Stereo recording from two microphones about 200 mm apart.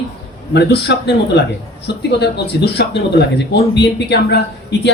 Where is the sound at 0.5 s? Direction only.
55° left (ahead or behind).